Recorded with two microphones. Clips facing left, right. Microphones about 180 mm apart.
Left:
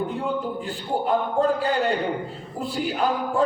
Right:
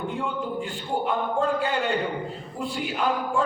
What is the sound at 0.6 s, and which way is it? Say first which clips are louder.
A man's voice: left 2 dB; 40° left (ahead or behind).